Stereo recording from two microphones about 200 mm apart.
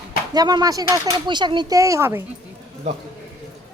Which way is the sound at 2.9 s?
35° right (ahead or behind).